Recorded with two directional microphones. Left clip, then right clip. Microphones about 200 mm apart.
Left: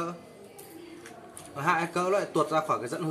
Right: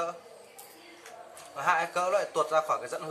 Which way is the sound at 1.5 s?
5° left (ahead or behind).